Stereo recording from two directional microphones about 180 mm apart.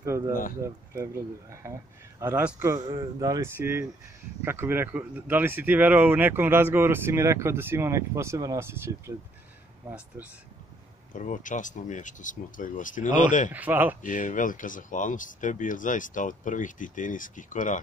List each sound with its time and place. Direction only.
0.0 s a sound: 15° right (ahead or behind)
1.6 s speech: 15° right (ahead or behind)
11.1 s speech: 45° left (ahead or behind)
13.5 s speech: 10° right (ahead or behind)
14.0 s speech: 45° left (ahead or behind)